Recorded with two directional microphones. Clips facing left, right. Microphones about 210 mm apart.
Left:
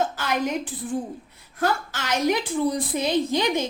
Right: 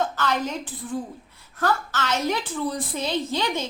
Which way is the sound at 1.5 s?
10° left (ahead or behind).